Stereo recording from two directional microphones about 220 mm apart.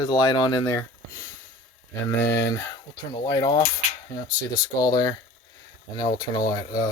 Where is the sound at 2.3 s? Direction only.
50° left (ahead or behind).